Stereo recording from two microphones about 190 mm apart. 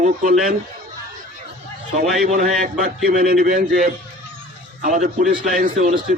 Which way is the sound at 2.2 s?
45° right (ahead or behind).